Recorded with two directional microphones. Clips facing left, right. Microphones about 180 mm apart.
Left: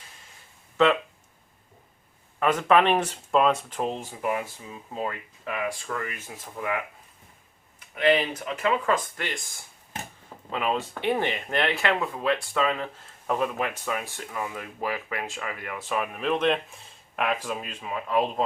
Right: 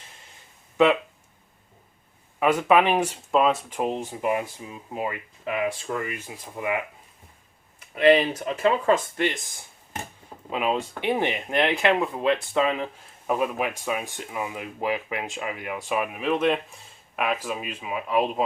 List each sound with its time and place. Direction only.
2.4 s speech: 10° right (ahead or behind)
8.4 s speech: 30° right (ahead or behind)
10.5 s speech: 15° right (ahead or behind)